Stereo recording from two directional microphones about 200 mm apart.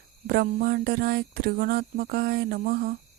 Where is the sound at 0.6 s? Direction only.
50° right (ahead or behind).